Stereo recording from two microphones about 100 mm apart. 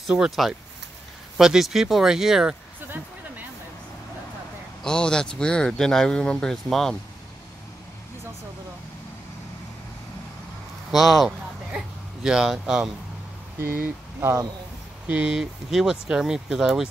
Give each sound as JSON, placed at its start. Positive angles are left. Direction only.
{"t": 0.0, "sound": "speech", "side_deg": -5}
{"t": 4.8, "sound": "speech", "side_deg": 10}
{"t": 10.9, "sound": "speech", "side_deg": 0}
{"t": 14.2, "sound": "speech", "side_deg": -30}
{"t": 15.0, "sound": "speech", "side_deg": -10}